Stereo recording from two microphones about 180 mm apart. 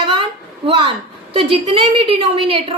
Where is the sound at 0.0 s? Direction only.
30° right (ahead or behind).